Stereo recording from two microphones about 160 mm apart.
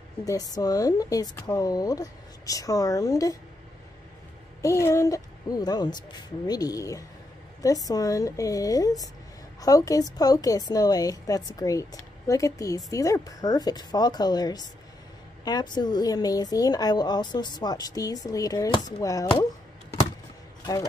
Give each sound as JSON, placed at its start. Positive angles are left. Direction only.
{"t": 0.2, "sound": "a woman's voice", "side_deg": 20}
{"t": 4.6, "sound": "a woman's voice", "side_deg": 20}